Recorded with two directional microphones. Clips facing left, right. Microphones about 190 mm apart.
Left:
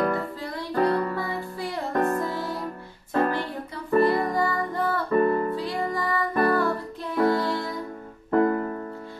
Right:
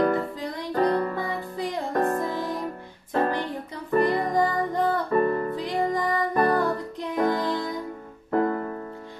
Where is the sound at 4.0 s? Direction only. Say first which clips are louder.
Even; 20° right (ahead or behind).